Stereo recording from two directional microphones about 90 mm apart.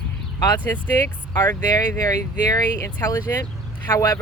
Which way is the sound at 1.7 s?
45° left (ahead or behind).